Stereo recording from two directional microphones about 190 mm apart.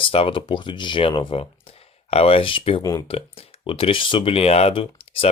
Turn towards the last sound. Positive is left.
turn(degrees=30)  # may be behind; listen again after turning